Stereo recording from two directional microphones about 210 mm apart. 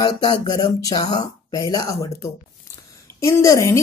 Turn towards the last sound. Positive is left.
turn(degrees=15)  # may be behind; listen again after turning